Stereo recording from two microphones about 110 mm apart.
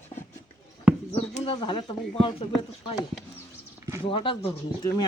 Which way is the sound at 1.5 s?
45° left (ahead or behind).